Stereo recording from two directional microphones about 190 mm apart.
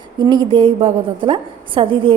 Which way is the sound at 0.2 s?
25° right (ahead or behind).